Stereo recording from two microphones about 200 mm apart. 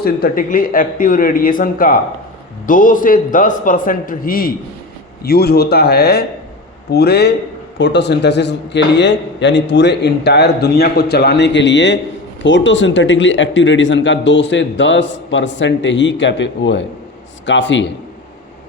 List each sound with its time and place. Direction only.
0.0 s a man's voice: 45° left (ahead or behind); by 17.9 s 65° left (ahead or behind)